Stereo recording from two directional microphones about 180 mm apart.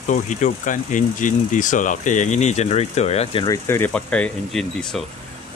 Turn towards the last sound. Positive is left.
turn(degrees=5)  # may be behind; listen again after turning